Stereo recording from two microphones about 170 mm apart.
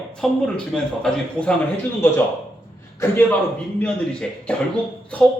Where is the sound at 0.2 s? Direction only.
5° left (ahead or behind).